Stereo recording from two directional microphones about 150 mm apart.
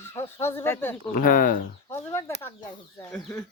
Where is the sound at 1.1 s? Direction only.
65° left (ahead or behind).